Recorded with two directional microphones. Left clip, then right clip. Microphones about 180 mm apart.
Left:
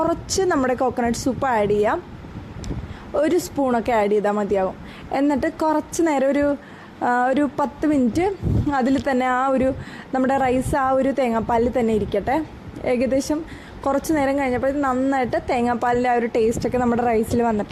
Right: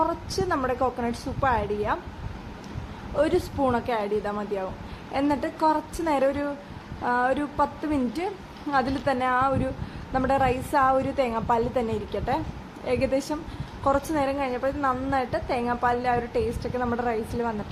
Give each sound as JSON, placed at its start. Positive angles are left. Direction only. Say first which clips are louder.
{"t": 0.0, "sound": "a woman's voice", "louder": "left 5 dB", "side_deg": 40}
{"t": 3.2, "sound": "a woman's voice", "louder": "left 4 dB", "side_deg": 30}
{"t": 3.8, "sound": "a woman's voice", "louder": "left 8 dB", "side_deg": 40}